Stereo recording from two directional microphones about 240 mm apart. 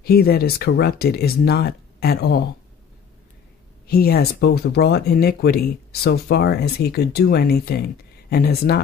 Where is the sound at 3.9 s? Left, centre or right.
Left.